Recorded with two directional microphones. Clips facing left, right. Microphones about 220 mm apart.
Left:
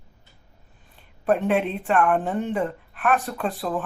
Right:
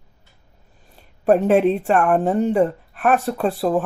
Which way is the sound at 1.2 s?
40° right (ahead or behind).